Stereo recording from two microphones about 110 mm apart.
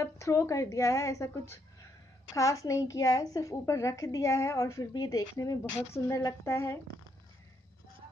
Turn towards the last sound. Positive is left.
turn(degrees=25)  # may be behind; listen again after turning